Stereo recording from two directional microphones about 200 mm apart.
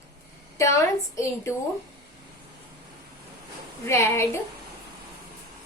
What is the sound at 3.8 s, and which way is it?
Speech, 15° left (ahead or behind).